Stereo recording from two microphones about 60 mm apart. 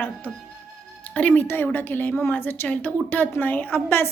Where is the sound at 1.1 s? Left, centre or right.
Left.